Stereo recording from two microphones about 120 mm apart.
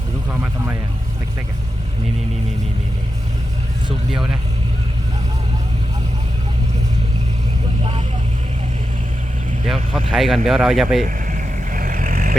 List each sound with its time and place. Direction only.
9.6 s speech: centre (ahead or behind)
11.0 s vehicle: 90° right